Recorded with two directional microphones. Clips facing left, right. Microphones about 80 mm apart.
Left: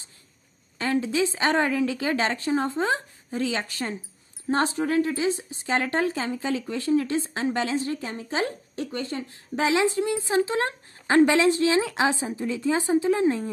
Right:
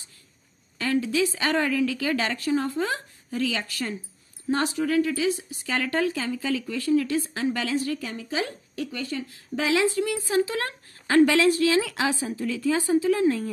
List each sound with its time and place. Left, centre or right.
0.7 s a woman's voice: left